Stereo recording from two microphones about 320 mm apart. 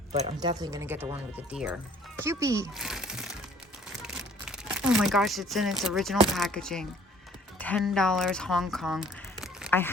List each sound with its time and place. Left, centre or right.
0.1 s speech: centre